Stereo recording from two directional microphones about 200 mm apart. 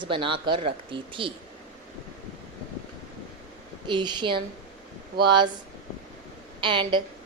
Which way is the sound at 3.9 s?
20° right (ahead or behind).